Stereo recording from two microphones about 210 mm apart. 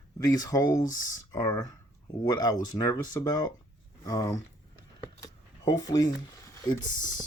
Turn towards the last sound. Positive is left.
turn(degrees=20)  # may be behind; listen again after turning